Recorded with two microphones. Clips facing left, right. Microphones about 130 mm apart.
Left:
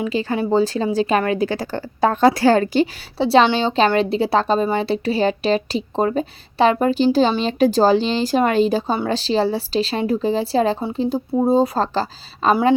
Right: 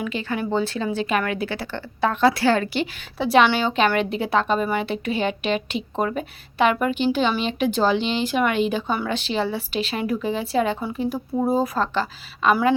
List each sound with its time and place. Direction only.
0.0 s a woman's voice: 35° left (ahead or behind)